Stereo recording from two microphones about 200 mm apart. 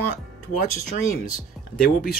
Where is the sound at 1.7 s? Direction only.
45° left (ahead or behind).